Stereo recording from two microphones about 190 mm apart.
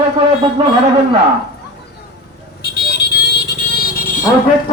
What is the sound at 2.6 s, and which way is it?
Vehicle, 55° left (ahead or behind).